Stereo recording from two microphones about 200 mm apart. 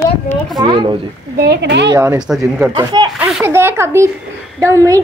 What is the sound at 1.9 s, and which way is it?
Speech, 20° right (ahead or behind).